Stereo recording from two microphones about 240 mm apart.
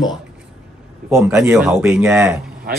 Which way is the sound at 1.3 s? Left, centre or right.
Centre.